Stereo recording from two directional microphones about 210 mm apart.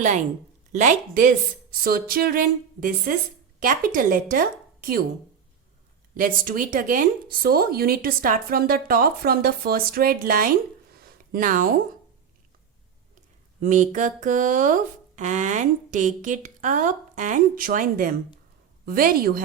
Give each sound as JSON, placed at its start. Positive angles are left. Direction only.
{"t": 0.7, "sound": "speech", "side_deg": -35}
{"t": 6.1, "sound": "speech", "side_deg": -40}
{"t": 10.9, "sound": "a sound", "side_deg": -45}
{"t": 13.6, "sound": "speech", "side_deg": -35}